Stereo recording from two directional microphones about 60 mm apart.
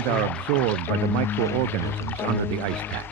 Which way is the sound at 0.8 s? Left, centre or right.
Left.